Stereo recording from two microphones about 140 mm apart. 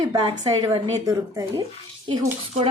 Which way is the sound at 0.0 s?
35° right (ahead or behind).